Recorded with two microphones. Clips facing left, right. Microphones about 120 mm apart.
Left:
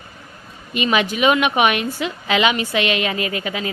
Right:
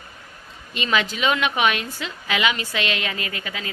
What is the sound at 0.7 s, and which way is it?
A woman's voice, 15° left (ahead or behind).